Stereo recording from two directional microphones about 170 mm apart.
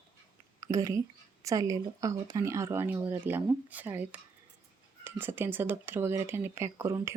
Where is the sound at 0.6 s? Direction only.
20° right (ahead or behind).